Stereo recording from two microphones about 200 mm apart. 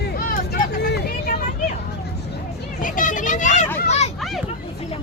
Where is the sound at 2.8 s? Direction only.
40° left (ahead or behind).